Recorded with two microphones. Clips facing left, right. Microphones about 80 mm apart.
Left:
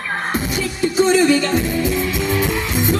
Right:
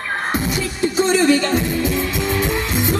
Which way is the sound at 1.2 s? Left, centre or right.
Right.